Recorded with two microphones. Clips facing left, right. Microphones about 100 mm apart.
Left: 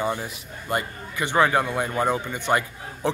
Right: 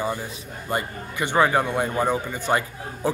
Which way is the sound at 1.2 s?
15° right (ahead or behind).